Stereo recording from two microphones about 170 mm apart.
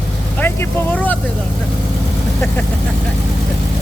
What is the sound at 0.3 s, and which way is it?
Speech, 10° left (ahead or behind).